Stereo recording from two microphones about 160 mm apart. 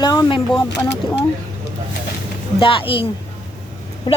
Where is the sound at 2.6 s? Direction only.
35° left (ahead or behind).